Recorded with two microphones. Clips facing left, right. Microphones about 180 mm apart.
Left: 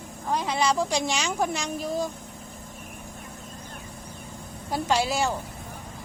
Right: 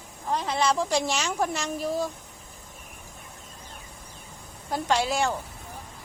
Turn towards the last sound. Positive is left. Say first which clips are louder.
# even
turn(degrees=5)  # may be behind; listen again after turning